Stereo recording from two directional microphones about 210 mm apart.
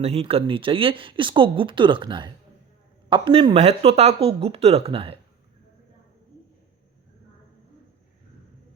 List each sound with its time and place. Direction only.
0.0 s speech: 30° right (ahead or behind)